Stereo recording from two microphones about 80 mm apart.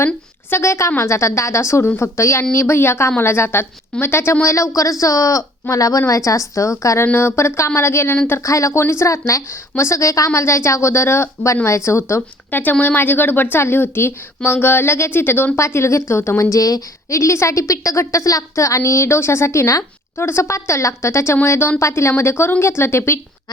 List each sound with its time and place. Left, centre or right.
0.5 s a woman's voice: left
7.0 s a woman's voice: left
12.5 s speech: left
15.5 s a woman's voice: left